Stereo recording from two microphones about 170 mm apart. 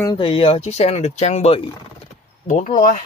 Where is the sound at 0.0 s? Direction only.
25° left (ahead or behind).